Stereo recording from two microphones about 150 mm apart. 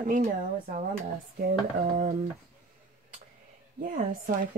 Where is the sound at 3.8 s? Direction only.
60° right (ahead or behind).